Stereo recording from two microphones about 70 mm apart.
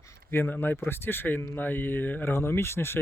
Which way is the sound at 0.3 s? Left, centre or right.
Left.